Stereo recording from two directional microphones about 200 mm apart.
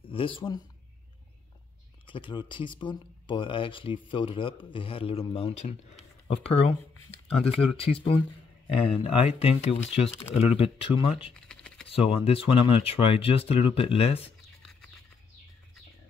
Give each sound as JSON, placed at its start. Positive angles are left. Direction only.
{"t": 0.0, "sound": "speech", "side_deg": 25}
{"t": 2.0, "sound": "speech", "side_deg": 25}
{"t": 11.3, "sound": "computer keyboard", "side_deg": 5}
{"t": 11.9, "sound": "speech", "side_deg": 30}